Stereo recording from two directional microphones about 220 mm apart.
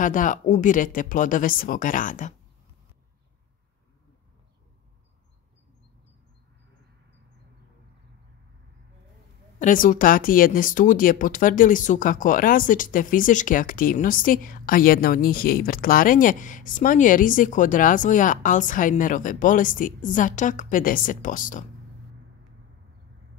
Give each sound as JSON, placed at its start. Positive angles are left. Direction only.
{"t": 0.0, "sound": "speech", "side_deg": 35}
{"t": 9.6, "sound": "speech", "side_deg": 35}